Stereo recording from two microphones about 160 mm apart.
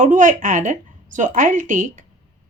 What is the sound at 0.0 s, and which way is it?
Speech, 55° right (ahead or behind).